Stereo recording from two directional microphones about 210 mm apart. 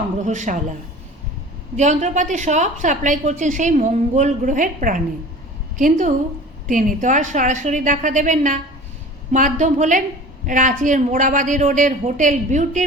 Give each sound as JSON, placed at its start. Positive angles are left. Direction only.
{"t": 0.3, "sound": "a woman's voice", "side_deg": -35}
{"t": 1.7, "sound": "a woman's voice", "side_deg": -35}